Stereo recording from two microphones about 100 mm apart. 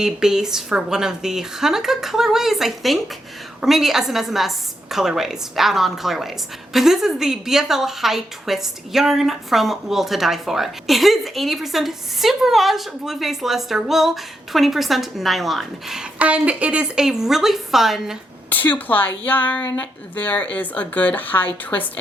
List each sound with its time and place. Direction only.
0.0 s a woman's voice: 5° right (ahead or behind)
16.1 s a woman's voice: 15° right (ahead or behind)
18.4 s a woman's voice: 15° left (ahead or behind)